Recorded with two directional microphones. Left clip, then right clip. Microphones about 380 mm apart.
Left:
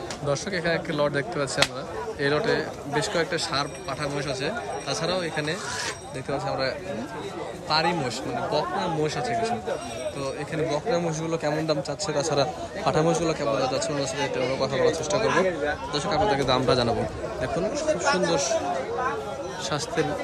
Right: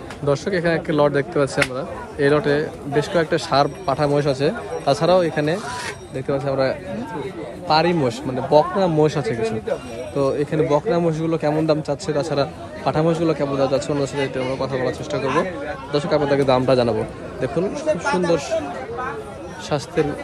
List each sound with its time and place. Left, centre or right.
0.3 s a man's voice: centre